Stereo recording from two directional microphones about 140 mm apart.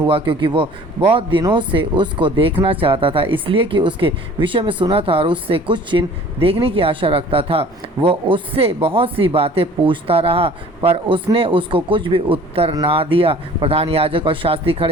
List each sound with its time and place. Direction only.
0.1 s speech: 35° right (ahead or behind)